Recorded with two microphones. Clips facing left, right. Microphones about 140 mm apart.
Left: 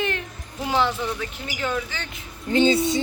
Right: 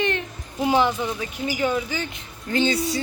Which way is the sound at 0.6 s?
15° right (ahead or behind).